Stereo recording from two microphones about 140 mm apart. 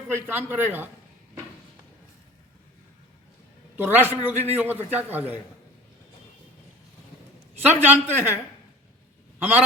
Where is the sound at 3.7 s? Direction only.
15° right (ahead or behind).